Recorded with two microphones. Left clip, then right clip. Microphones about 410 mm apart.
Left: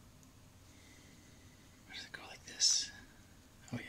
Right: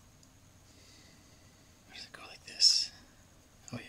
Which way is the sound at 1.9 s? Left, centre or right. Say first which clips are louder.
Even; centre.